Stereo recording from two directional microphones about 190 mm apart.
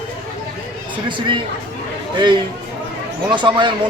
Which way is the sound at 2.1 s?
25° right (ahead or behind).